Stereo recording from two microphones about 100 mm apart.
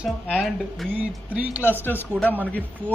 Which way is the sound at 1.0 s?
15° right (ahead or behind).